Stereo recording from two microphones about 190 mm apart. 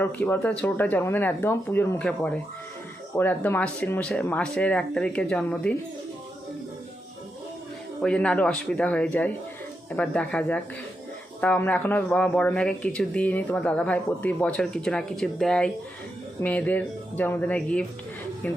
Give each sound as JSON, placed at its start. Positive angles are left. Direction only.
{"t": 0.0, "sound": "speech", "side_deg": 10}
{"t": 8.0, "sound": "speech", "side_deg": 5}